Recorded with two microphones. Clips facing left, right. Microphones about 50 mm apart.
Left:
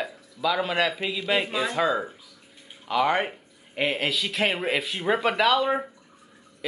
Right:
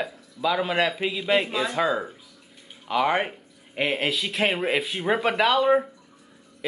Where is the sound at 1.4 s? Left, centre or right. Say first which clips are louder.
Even; centre.